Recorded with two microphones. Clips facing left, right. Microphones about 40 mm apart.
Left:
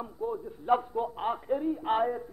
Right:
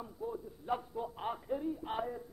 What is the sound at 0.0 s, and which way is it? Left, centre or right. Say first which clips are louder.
A man's voice: left 7 dB; left.